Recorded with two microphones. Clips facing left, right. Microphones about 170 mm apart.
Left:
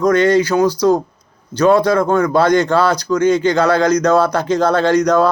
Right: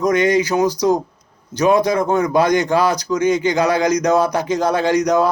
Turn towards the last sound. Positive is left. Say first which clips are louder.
# left 3 dB
turn(degrees=-15)  # may be behind; listen again after turning